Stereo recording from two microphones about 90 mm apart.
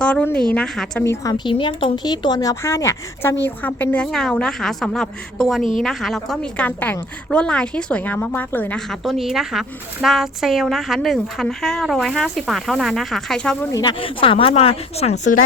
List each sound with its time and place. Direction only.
0.0 s a sound: 15° left (ahead or behind)
0.5 s a woman's voice: 10° left (ahead or behind)
1.0 s a woman's voice: 30° left (ahead or behind)
1.5 s speech: 65° left (ahead or behind)
2.0 s a woman's voice: 50° left (ahead or behind); by 3.3 s 30° left (ahead or behind)
3.4 s a woman's voice: 20° left (ahead or behind)
4.1 s speech: 5° left (ahead or behind)
6.7 s a woman's voice: 20° left (ahead or behind)
8.9 s speech: centre (ahead or behind)
14.0 s speech: 85° left